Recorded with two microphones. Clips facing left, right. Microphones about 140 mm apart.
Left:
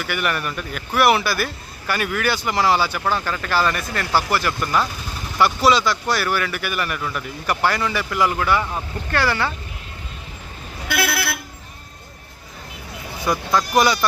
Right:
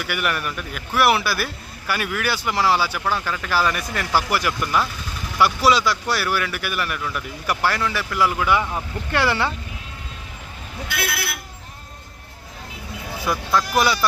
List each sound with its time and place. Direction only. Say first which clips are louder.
0.0 s speech: left 1 dB; 5° right (ahead or behind); by 9.5 s 25° right (ahead or behind)
10.8 s vehicle: left 5 dB; 70° left (ahead or behind)
13.5 s speech: left 2 dB; centre (ahead or behind)